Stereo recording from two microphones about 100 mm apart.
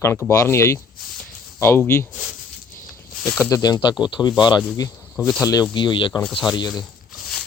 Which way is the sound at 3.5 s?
40° left (ahead or behind).